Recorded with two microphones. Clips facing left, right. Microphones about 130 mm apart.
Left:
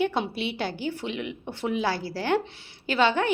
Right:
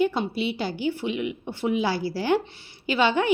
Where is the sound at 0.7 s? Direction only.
50° left (ahead or behind).